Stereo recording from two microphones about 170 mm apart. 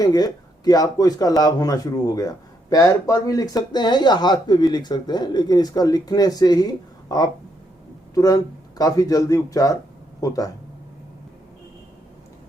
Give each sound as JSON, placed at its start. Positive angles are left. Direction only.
{"t": 0.0, "sound": "speech", "side_deg": 20}